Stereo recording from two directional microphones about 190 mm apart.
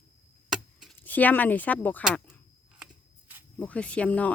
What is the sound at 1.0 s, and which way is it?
Speech, 10° left (ahead or behind).